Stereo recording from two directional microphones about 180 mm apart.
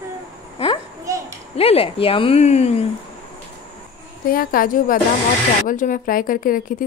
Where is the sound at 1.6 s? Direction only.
30° left (ahead or behind).